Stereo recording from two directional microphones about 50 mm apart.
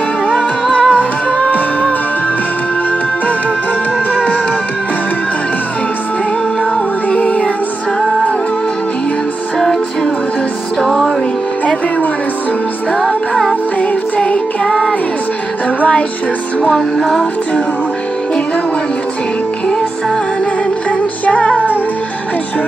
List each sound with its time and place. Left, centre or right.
0.4 s music: left
4.1 s music: centre
7.1 s music: left
10.8 s music: centre
12.9 s music: centre
13.7 s music: left
14.7 s music: centre
16.7 s music: centre
21.3 s music: left